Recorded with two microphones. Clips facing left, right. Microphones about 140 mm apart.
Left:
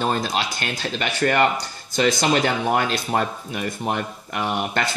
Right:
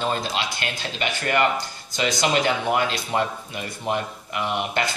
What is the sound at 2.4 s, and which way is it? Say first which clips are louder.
Speech: left 1 dB; 45° left (ahead or behind).